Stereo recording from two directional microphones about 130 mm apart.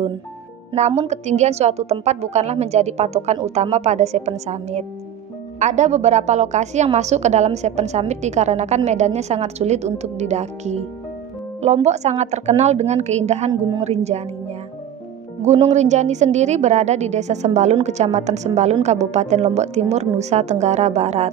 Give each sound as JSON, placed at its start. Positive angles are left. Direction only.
{"t": 0.7, "sound": "a woman's voice", "side_deg": -55}
{"t": 15.4, "sound": "a woman's voice", "side_deg": -55}